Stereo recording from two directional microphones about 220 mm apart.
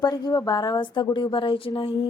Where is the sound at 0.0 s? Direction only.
15° left (ahead or behind).